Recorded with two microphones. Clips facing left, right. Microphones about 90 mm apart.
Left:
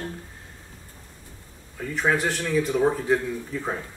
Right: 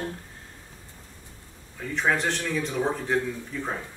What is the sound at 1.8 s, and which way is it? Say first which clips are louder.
Speech: left 2 dB; centre (ahead or behind).